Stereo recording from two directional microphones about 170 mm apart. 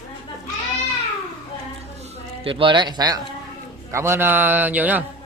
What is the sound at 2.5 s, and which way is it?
A man's voice, 30° right (ahead or behind).